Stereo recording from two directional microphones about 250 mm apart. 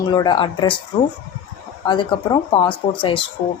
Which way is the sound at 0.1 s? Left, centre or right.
Centre.